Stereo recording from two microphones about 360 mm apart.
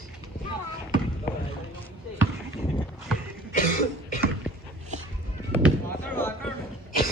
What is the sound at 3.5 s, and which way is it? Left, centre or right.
Cough, left.